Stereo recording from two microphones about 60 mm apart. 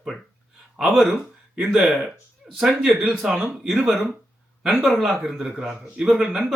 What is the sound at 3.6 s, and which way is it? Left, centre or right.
Speech, centre.